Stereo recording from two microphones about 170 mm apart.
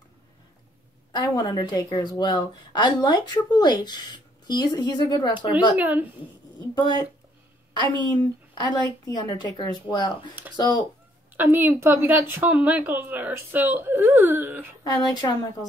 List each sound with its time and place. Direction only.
1.1 s a woman's voice: 25° left (ahead or behind)
5.8 s a woman's voice: 10° right (ahead or behind)
8.1 s a woman's voice: 25° left (ahead or behind)
11.3 s a woman's voice: 15° right (ahead or behind)
14.8 s a woman's voice: 25° left (ahead or behind)